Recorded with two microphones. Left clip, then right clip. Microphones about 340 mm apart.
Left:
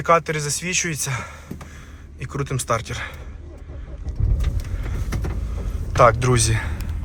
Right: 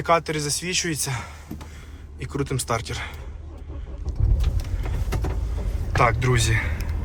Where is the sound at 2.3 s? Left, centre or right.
Centre.